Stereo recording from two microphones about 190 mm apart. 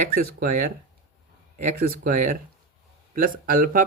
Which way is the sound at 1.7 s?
50° right (ahead or behind).